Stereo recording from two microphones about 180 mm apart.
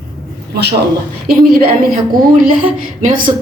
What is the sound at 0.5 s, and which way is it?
Speech, 65° right (ahead or behind).